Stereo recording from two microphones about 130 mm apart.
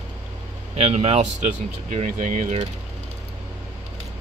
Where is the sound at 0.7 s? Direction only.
50° right (ahead or behind).